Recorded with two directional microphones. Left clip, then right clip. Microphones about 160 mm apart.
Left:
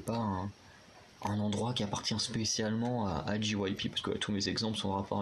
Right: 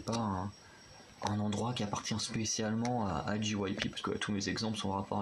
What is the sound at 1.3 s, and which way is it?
Speech, 10° left (ahead or behind).